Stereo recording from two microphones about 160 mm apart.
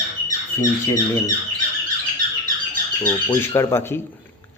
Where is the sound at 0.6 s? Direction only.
20° left (ahead or behind).